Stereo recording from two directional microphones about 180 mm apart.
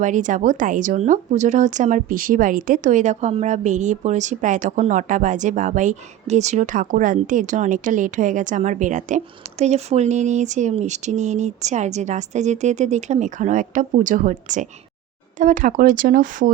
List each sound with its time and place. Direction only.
0.0 s speech: 45° right (ahead or behind)